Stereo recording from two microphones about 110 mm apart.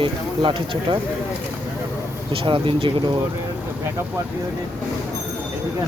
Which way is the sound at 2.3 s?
50° right (ahead or behind).